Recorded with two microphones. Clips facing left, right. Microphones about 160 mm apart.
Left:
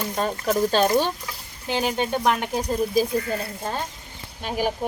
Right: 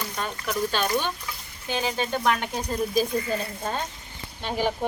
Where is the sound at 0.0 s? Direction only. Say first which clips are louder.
Left 6 dB; 40° left (ahead or behind).